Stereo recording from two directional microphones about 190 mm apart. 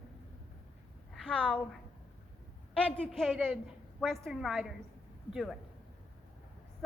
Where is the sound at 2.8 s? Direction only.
5° left (ahead or behind).